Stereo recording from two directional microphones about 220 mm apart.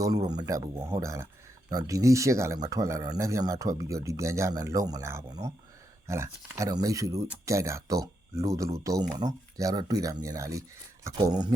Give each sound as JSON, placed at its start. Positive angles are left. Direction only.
{"t": 0.0, "sound": "speech", "side_deg": -15}